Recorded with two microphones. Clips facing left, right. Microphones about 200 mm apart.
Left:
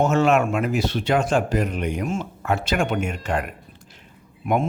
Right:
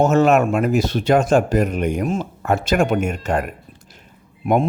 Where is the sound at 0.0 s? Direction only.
40° right (ahead or behind).